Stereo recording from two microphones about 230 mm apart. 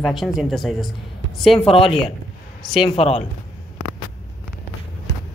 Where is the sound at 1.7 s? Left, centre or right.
Left.